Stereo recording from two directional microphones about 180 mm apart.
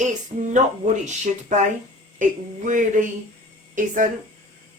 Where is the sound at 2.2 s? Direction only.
45° right (ahead or behind).